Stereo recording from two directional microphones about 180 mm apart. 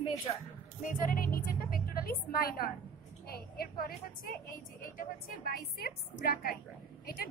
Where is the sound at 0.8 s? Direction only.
50° left (ahead or behind).